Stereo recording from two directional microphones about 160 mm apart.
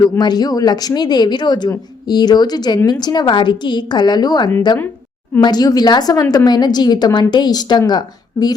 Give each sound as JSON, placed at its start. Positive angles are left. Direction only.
{"t": 0.0, "sound": "a woman's voice", "side_deg": 25}